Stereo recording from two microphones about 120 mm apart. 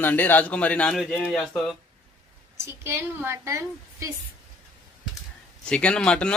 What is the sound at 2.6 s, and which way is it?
A woman's voice, 20° right (ahead or behind).